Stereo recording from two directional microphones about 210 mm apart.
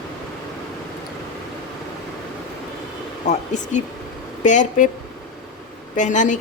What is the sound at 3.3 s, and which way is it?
A woman's voice, 35° left (ahead or behind).